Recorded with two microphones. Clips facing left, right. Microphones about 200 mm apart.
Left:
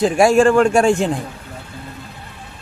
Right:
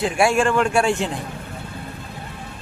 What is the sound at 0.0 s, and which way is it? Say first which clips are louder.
A man's voice: left 6 dB; 40° left (ahead or behind).